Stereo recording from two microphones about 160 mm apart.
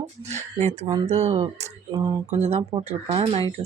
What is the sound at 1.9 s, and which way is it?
Speech, 25° right (ahead or behind).